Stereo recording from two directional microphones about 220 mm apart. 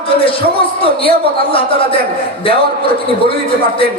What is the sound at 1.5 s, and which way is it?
Speech, 25° left (ahead or behind).